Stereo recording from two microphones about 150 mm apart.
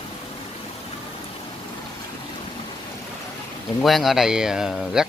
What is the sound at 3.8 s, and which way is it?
Speech, centre (ahead or behind).